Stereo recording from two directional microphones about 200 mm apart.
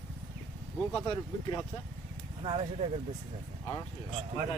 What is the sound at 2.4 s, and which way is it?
Speech, 30° right (ahead or behind).